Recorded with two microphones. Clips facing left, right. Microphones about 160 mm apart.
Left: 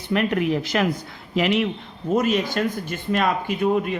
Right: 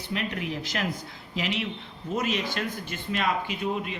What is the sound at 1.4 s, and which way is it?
Speech, 55° left (ahead or behind).